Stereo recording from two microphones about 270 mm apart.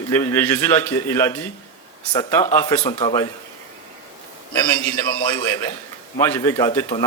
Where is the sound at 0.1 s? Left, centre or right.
Centre.